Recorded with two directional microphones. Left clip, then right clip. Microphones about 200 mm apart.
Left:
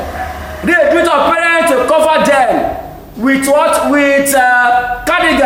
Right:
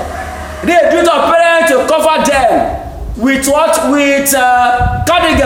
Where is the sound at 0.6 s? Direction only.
15° right (ahead or behind).